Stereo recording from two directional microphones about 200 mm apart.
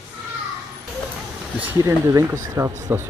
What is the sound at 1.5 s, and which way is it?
Speech, 10° right (ahead or behind).